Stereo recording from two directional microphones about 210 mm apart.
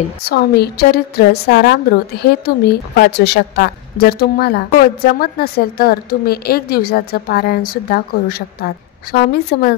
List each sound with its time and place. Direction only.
0.3 s a woman's voice: 50° left (ahead or behind)